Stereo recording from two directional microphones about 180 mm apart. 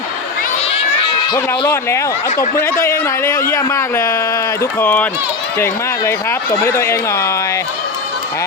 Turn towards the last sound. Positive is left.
turn(degrees=15)  # may be behind; listen again after turning